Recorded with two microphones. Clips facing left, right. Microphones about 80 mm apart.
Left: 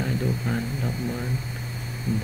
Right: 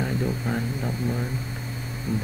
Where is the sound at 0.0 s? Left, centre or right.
Centre.